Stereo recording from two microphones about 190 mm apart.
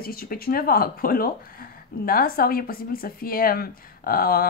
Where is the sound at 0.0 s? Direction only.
50° left (ahead or behind).